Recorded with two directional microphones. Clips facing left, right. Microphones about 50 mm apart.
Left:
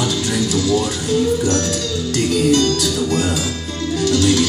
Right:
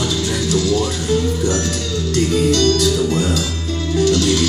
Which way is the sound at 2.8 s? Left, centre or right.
Centre.